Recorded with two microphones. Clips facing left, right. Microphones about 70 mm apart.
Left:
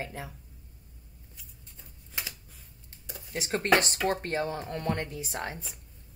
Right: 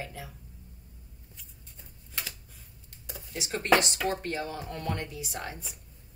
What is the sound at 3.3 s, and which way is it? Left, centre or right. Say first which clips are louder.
A woman's voice: even; left.